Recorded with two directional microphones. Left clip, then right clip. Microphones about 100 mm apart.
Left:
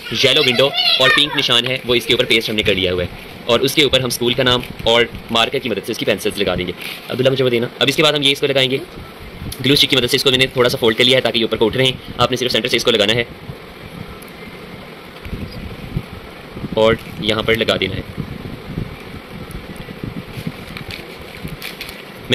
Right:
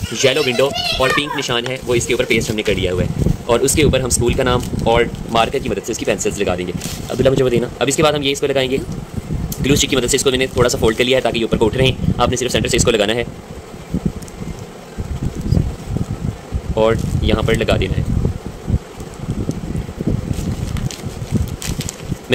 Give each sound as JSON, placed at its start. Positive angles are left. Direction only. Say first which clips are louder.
{"t": 0.1, "sound": "speech", "louder": "left 2 dB", "side_deg": 0}
{"t": 3.6, "sound": "speech", "louder": "left 1 dB", "side_deg": -10}
{"t": 12.4, "sound": "speech", "louder": "left 1 dB", "side_deg": -15}
{"t": 16.7, "sound": "speech", "louder": "left 1 dB", "side_deg": -5}